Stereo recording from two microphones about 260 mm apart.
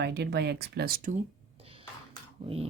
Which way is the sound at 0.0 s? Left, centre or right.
Right.